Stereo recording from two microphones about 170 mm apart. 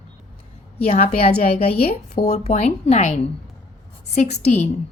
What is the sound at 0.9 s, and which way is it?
Speech, 60° left (ahead or behind).